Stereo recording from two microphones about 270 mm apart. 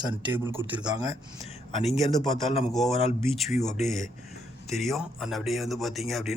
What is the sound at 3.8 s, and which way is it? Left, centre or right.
Speech, centre.